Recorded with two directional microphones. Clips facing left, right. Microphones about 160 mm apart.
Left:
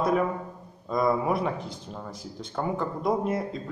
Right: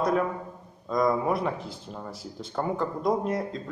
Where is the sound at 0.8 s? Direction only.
5° left (ahead or behind).